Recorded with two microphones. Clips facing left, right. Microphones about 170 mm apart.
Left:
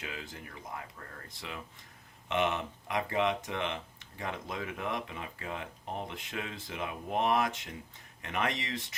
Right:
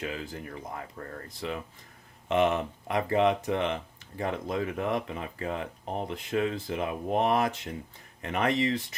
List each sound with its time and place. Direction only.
0.0 s speech: 35° right (ahead or behind)